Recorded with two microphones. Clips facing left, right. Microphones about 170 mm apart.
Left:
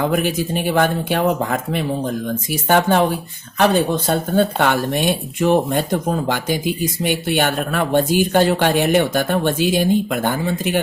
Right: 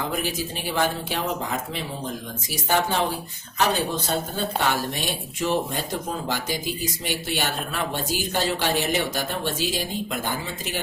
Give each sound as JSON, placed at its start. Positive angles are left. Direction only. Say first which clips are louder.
{"t": 0.0, "sound": "speech", "louder": "left 9 dB", "side_deg": 60}